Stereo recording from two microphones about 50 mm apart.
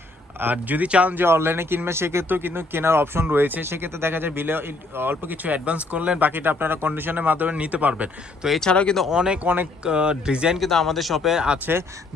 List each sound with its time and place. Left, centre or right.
0.5 s speech: right
1.1 s speech: right
2.3 s speech: right
8.6 s speech: centre
9.0 s speech: centre
9.4 s speech: right
9.8 s speech: centre
10.6 s speech: centre
11.3 s speech: centre
11.6 s speech: right